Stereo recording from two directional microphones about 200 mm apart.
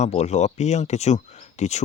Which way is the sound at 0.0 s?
35° left (ahead or behind).